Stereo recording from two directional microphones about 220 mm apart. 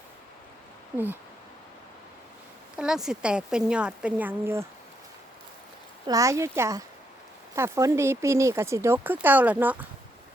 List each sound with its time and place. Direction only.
0.9 s speech: 10° right (ahead or behind)
2.7 s speech: 5° right (ahead or behind)
6.1 s speech: 15° right (ahead or behind)